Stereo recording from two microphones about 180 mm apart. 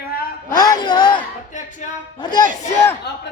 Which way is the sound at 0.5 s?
25° left (ahead or behind).